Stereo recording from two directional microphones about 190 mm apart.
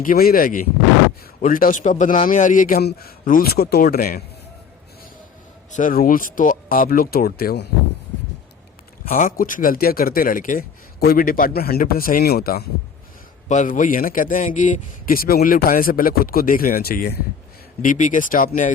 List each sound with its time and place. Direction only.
0.0 s speech: 50° left (ahead or behind)
5.7 s speech: 45° left (ahead or behind)
9.0 s speech: 45° left (ahead or behind)
13.5 s speech: 40° left (ahead or behind)
17.8 s speech: 40° left (ahead or behind)